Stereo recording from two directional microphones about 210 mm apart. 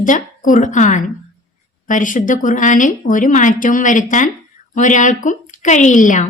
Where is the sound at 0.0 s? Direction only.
40° left (ahead or behind).